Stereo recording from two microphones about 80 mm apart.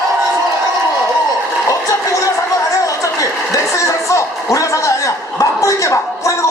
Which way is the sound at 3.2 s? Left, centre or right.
Left.